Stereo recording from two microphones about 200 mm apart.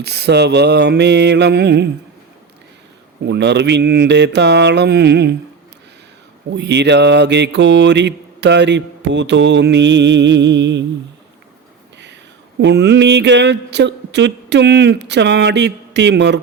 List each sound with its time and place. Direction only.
0.0 s mantra: 55° right (ahead or behind)
3.2 s mantra: 60° right (ahead or behind)
6.5 s mantra: 60° right (ahead or behind)
12.5 s mantra: 60° right (ahead or behind)